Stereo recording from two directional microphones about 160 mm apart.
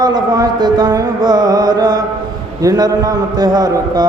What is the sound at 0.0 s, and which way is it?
Music, 25° right (ahead or behind).